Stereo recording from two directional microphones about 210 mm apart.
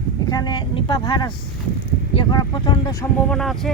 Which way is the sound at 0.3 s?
20° left (ahead or behind).